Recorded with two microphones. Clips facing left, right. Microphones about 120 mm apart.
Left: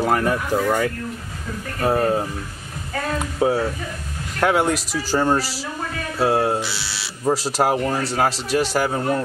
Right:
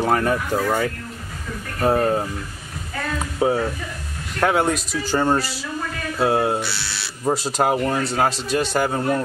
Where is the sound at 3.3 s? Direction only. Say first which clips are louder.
Even; centre (ahead or behind).